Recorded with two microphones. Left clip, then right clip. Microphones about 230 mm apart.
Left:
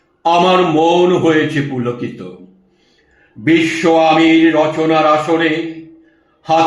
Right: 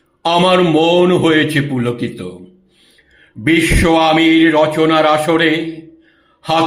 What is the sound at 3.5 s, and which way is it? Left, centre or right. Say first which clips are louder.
A man's voice: even; right.